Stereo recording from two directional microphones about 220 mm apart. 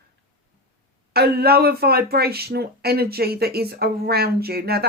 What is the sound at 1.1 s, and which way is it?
Speech, 45° right (ahead or behind).